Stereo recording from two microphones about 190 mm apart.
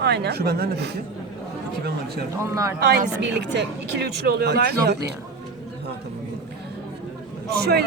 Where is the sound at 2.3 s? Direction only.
15° right (ahead or behind).